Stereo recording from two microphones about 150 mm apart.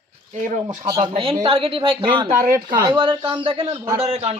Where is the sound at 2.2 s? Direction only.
70° right (ahead or behind).